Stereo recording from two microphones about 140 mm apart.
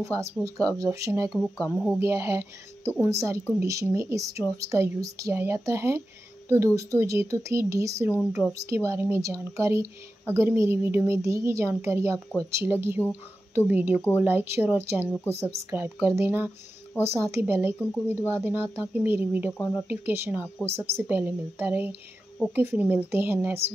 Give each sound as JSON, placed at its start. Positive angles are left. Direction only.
{"t": 0.0, "sound": "speech", "side_deg": -20}
{"t": 1.3, "sound": "speech", "side_deg": 5}
{"t": 2.0, "sound": "speech", "side_deg": -20}